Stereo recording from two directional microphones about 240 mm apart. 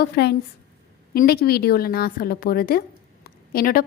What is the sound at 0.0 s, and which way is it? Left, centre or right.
A woman's voice, left.